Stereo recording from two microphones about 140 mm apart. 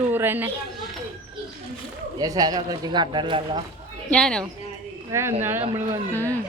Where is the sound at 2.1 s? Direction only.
25° right (ahead or behind).